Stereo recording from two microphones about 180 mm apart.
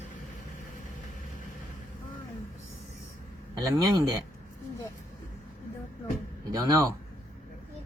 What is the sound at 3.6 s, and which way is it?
Speech, 20° right (ahead or behind).